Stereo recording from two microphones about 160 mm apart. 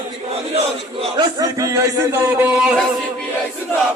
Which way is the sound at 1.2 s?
25° right (ahead or behind).